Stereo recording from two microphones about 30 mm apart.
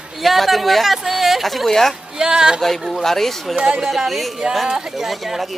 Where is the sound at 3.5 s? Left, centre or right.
Right.